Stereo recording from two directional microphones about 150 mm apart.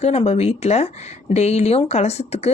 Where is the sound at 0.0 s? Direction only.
45° left (ahead or behind).